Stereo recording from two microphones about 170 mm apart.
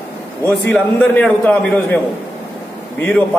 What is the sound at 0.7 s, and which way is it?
A man's voice, 10° left (ahead or behind).